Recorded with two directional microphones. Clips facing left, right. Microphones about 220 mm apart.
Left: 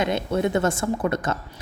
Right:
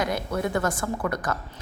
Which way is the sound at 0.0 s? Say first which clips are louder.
Left 4 dB; 25° left (ahead or behind).